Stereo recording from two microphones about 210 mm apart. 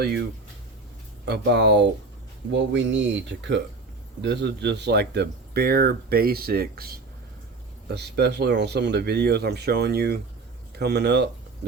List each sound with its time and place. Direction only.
1.2 s speech: 55° right (ahead or behind)
4.2 s speech: 55° right (ahead or behind)